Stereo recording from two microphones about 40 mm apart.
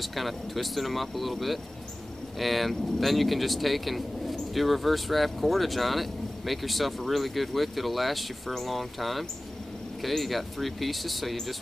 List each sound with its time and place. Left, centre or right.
0.0 s speech: centre